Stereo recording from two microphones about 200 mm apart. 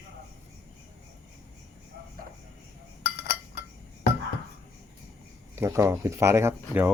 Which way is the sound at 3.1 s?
55° left (ahead or behind).